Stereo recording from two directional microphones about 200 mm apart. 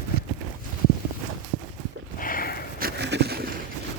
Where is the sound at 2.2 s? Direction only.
45° left (ahead or behind).